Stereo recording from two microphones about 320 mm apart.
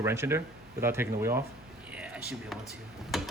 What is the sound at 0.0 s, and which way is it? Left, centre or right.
Speech, centre.